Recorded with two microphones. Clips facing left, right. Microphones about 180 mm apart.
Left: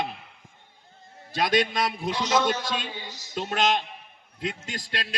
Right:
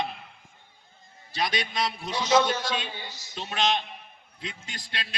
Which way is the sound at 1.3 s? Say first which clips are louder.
Left 6 dB; 50° left (ahead or behind).